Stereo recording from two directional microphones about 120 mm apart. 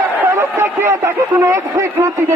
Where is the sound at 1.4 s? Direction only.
25° right (ahead or behind).